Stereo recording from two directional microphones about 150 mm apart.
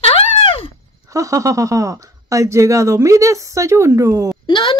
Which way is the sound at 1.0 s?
20° right (ahead or behind).